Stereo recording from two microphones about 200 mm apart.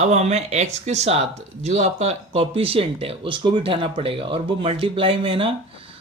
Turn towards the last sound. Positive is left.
turn(degrees=-25)  # may be behind; listen again after turning